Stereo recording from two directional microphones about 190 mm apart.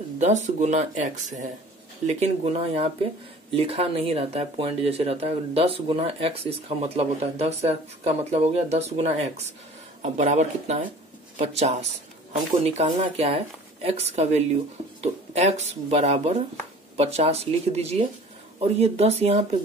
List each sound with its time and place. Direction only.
0.2 s speech: 40° right (ahead or behind)